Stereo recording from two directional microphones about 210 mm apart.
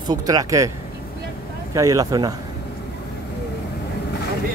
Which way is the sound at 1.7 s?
15° right (ahead or behind).